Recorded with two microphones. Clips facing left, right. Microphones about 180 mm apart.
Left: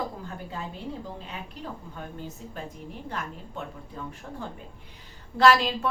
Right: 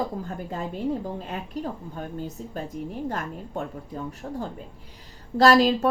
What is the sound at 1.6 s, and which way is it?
Speech, 45° right (ahead or behind).